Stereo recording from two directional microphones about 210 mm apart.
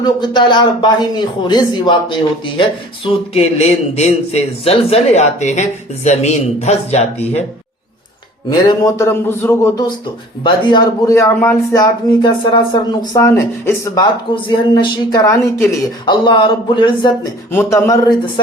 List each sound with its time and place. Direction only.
0.0 s a man's voice: 20° left (ahead or behind)
8.4 s a man's voice: 20° left (ahead or behind)
17.5 s a man's voice: 10° left (ahead or behind)